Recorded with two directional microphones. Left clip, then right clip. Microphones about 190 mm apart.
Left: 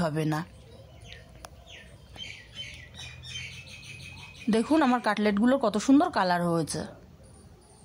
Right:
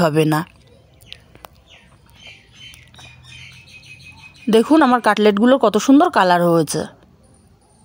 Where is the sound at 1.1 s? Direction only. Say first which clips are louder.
Right 11 dB; 40° right (ahead or behind).